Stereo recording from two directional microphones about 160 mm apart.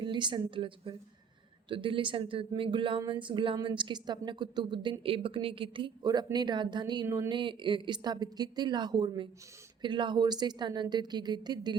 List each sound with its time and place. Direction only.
0.0 s a woman's voice: 30° right (ahead or behind)